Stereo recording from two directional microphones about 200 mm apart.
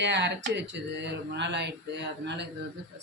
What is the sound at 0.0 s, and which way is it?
Speech, 60° right (ahead or behind).